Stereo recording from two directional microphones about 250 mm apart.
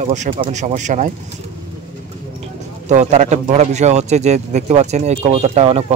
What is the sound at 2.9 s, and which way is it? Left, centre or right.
Speech, right.